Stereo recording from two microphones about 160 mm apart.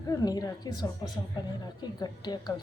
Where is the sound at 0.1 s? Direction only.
25° left (ahead or behind).